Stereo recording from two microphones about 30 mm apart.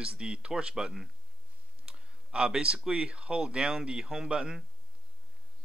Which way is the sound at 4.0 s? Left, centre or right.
Right.